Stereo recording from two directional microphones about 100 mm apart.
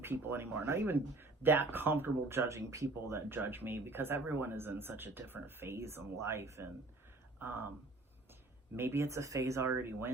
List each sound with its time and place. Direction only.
0.0 s speech: 20° right (ahead or behind)
8.7 s speech: 25° right (ahead or behind)